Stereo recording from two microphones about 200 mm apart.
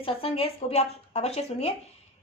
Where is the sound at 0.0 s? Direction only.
30° left (ahead or behind).